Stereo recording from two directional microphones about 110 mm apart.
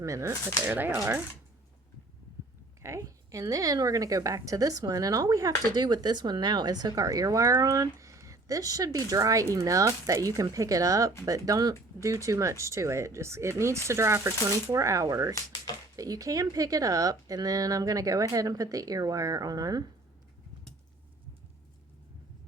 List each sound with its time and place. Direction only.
0.0 s speech: 25° right (ahead or behind)
2.8 s speech: 25° right (ahead or behind)